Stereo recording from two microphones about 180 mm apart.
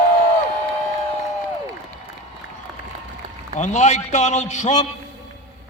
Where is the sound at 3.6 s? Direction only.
40° left (ahead or behind).